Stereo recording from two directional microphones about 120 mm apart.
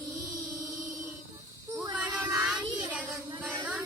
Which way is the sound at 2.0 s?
10° right (ahead or behind).